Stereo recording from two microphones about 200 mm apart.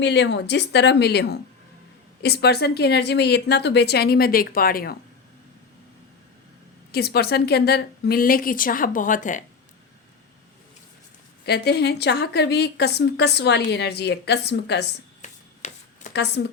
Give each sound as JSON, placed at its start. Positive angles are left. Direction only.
{"t": 0.0, "sound": "a woman's voice", "side_deg": 60}
{"t": 6.9, "sound": "a woman's voice", "side_deg": 55}
{"t": 11.4, "sound": "a woman's voice", "side_deg": 55}
{"t": 15.2, "sound": "a sound", "side_deg": 35}
{"t": 16.1, "sound": "a woman's voice", "side_deg": 55}